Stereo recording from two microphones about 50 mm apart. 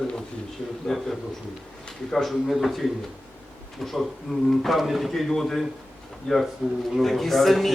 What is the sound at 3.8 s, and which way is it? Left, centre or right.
A man's voice, centre.